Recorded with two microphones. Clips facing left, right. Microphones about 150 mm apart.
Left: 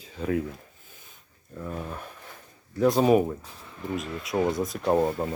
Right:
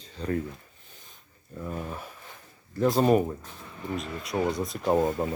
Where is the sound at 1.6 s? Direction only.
5° right (ahead or behind).